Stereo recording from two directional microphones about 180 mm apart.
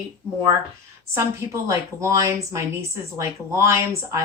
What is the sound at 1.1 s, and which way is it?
Speech, 15° right (ahead or behind).